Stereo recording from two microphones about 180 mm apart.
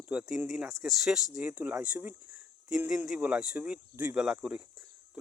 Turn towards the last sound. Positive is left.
turn(degrees=-5)  # may be behind; listen again after turning